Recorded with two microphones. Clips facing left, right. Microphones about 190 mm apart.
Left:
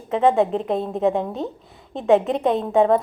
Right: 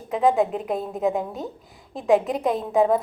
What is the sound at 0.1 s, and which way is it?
A woman's voice, centre (ahead or behind).